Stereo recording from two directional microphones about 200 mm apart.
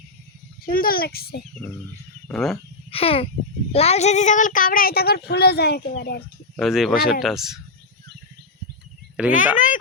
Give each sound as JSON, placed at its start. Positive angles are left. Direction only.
{"t": 0.6, "sound": "speech", "side_deg": 45}
{"t": 2.2, "sound": "speech", "side_deg": 5}
{"t": 2.9, "sound": "a child's voice", "side_deg": 30}
{"t": 6.6, "sound": "speech", "side_deg": 0}
{"t": 9.3, "sound": "speech", "side_deg": 40}